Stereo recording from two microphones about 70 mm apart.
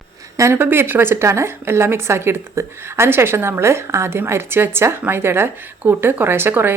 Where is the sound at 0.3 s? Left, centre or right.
Right.